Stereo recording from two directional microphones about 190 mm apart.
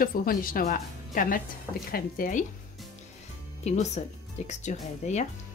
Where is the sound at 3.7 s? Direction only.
40° left (ahead or behind).